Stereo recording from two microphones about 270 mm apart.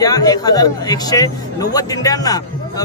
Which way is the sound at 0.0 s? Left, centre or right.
Centre.